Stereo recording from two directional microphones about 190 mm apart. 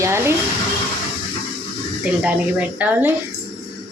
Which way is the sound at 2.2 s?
5° right (ahead or behind).